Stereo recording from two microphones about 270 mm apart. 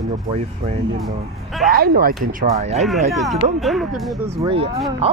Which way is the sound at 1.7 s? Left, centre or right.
Right.